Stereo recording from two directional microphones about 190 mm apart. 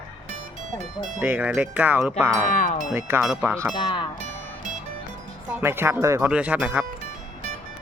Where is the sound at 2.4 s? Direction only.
45° left (ahead or behind).